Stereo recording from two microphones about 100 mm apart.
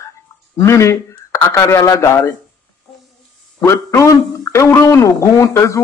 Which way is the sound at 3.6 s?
30° left (ahead or behind).